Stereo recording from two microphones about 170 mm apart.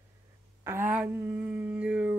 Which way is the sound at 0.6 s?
15° right (ahead or behind).